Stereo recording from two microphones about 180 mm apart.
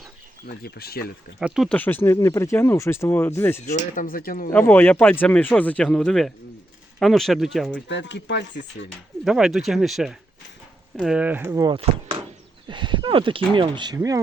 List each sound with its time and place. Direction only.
0.4 s speech: 60° left (ahead or behind)
1.4 s speech: centre (ahead or behind)
1.7 s speech: 10° left (ahead or behind)
3.9 s speech: 55° left (ahead or behind)
4.5 s speech: 10° left (ahead or behind)
7.9 s speech: 85° left
9.2 s speech: centre (ahead or behind)
11.7 s speech: 30° right (ahead or behind)